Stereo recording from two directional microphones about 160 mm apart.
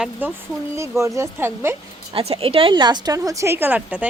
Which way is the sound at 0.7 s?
20° right (ahead or behind).